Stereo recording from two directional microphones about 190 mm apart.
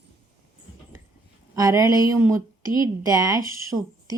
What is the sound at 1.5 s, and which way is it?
Speech, 20° right (ahead or behind).